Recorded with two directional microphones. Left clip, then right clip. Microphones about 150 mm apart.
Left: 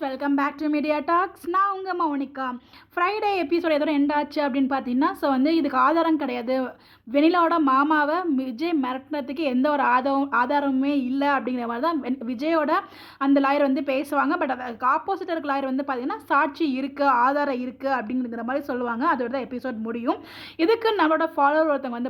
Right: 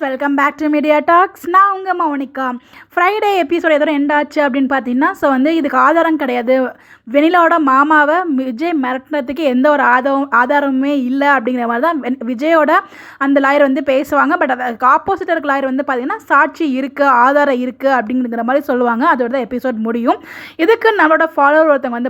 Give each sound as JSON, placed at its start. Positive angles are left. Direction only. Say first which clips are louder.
{"t": 0.1, "sound": "a woman's voice", "louder": "right 10 dB", "side_deg": -45}
{"t": 3.7, "sound": "a woman's voice", "louder": "right 10 dB", "side_deg": -35}
{"t": 20.6, "sound": "a woman's voice", "louder": "right 10 dB", "side_deg": -40}